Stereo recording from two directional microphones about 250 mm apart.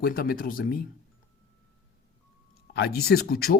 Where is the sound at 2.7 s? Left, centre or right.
Left.